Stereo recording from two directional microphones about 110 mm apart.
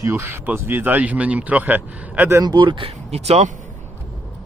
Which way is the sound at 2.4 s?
40° right (ahead or behind).